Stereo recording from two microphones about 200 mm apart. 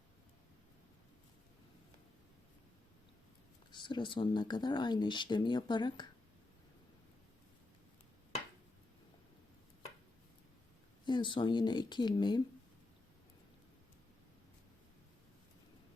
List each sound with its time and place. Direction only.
3.7 s speech: 25° left (ahead or behind)
11.0 s speech: 25° left (ahead or behind)